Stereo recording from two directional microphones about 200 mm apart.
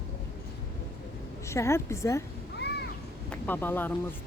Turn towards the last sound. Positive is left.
turn(degrees=10)  # may be behind; listen again after turning